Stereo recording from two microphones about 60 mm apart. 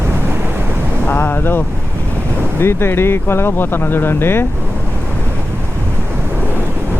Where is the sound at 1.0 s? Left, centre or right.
Left.